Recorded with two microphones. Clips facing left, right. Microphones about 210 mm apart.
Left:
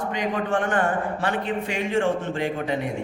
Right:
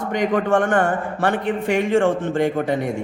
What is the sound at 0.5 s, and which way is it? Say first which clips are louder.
A man's voice: right 5 dB; 50° right (ahead or behind).